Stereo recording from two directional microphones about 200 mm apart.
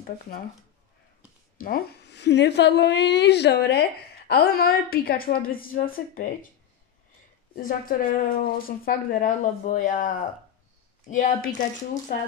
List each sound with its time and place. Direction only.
1.6 s a woman's voice: 50° left (ahead or behind)
7.5 s speech: 45° left (ahead or behind)